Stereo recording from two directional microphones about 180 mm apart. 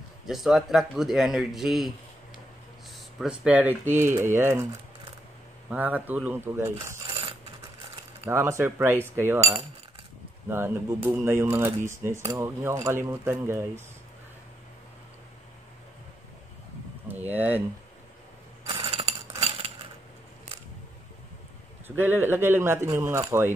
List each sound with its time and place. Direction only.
0.3 s a man's voice: centre (ahead or behind)
3.2 s speech: 5° right (ahead or behind)
5.7 s speech: 10° right (ahead or behind)
7.1 s mechanisms: 30° right (ahead or behind)
8.3 s speech: 15° right (ahead or behind)
8.9 s cutlery: 10° left (ahead or behind)
9.4 s cutlery: 30° right (ahead or behind)
10.5 s speech: 15° right (ahead or behind)
17.3 s speech: 10° right (ahead or behind)
18.7 s a sound: 30° right (ahead or behind)
19.4 s cutlery: 30° right (ahead or behind)
21.8 s speech: 10° right (ahead or behind)